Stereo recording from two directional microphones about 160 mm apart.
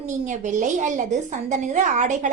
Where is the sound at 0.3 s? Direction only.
50° right (ahead or behind).